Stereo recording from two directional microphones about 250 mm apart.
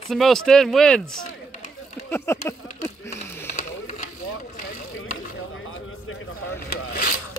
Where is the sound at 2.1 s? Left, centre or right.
Centre.